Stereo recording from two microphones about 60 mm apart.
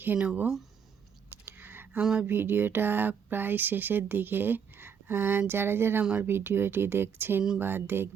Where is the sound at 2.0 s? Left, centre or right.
Centre.